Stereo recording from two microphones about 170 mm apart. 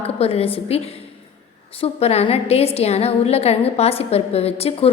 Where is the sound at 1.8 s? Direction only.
35° left (ahead or behind).